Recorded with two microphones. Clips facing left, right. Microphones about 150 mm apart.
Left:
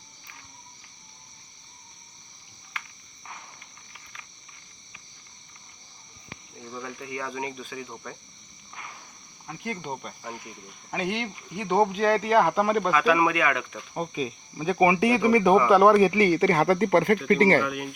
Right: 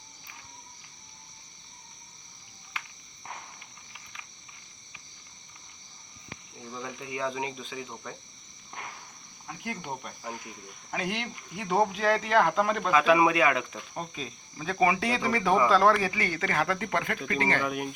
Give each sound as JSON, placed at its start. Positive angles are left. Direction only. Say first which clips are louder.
{"t": 6.7, "sound": "speech", "louder": "left 1 dB", "side_deg": -5}
{"t": 9.5, "sound": "speech", "louder": "left 3 dB", "side_deg": -5}
{"t": 12.9, "sound": "speech", "louder": "even", "side_deg": -20}
{"t": 13.9, "sound": "speech", "louder": "left 9 dB", "side_deg": 10}
{"t": 17.7, "sound": "speech", "louder": "even", "side_deg": -35}